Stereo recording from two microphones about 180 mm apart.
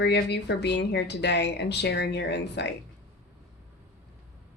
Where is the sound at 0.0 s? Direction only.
70° left (ahead or behind).